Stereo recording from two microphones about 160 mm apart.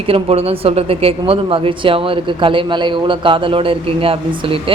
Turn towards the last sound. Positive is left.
turn(degrees=-35)  # may be behind; listen again after turning